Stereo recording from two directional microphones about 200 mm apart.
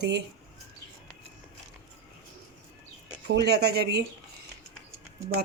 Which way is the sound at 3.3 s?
55° right (ahead or behind).